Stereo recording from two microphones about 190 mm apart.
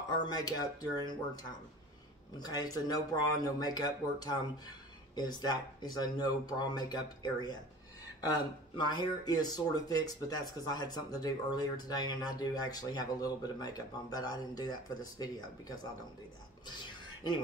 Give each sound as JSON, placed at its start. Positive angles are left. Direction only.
{"t": 0.2, "sound": "speech", "side_deg": 20}